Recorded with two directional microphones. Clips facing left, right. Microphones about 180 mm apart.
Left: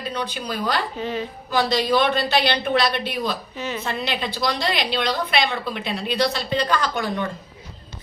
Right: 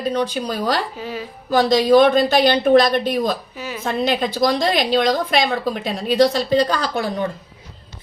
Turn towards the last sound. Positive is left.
turn(degrees=-35)  # may be behind; listen again after turning